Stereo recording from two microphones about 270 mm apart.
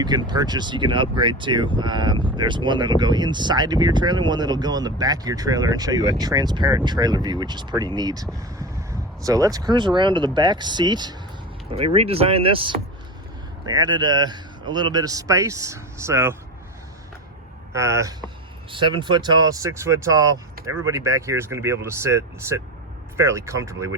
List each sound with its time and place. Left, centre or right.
0.0 s speech: centre
13.7 s speech: centre
17.7 s speech: centre